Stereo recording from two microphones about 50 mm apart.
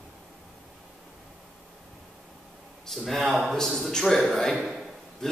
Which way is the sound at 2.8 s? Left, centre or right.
Centre.